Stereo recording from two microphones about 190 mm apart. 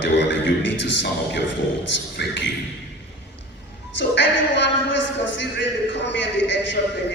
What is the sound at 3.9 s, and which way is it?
A man's voice, 70° left (ahead or behind).